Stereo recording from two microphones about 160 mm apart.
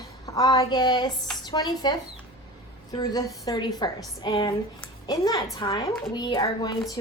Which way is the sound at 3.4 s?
25° left (ahead or behind).